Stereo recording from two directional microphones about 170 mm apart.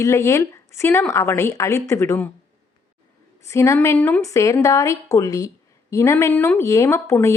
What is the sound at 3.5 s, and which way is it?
A woman's voice, 15° left (ahead or behind).